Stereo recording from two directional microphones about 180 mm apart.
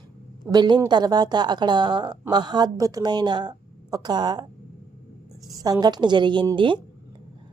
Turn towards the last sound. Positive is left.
turn(degrees=-25)  # may be behind; listen again after turning